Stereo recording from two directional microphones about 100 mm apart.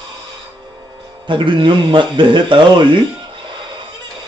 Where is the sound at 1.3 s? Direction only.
55° right (ahead or behind).